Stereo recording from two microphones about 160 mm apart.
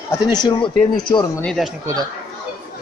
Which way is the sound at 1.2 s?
10° left (ahead or behind).